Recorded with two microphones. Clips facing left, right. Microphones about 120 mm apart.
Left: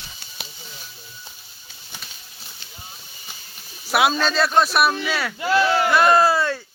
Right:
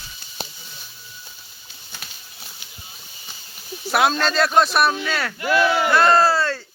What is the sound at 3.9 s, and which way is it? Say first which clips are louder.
Speech: even; 5° left (ahead or behind).